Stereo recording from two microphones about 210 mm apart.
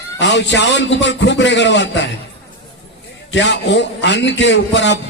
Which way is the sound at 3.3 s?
60° left (ahead or behind).